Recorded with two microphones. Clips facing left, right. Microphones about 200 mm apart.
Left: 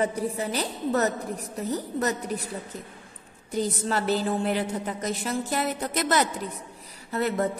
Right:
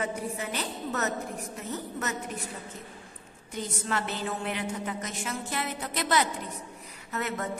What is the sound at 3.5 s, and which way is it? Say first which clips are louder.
A woman's voice: left 6 dB; 35° left (ahead or behind).